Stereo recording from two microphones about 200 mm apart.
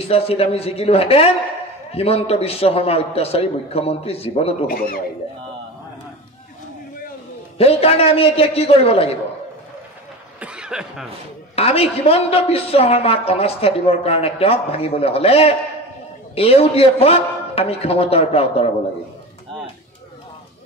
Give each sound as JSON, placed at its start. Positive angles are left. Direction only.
{"t": 0.0, "sound": "a woman's voice", "side_deg": 30}
{"t": 4.6, "sound": "speech", "side_deg": 45}
{"t": 7.5, "sound": "a woman's voice", "side_deg": 30}
{"t": 10.4, "sound": "cough", "side_deg": -5}
{"t": 11.5, "sound": "a woman's voice", "side_deg": 30}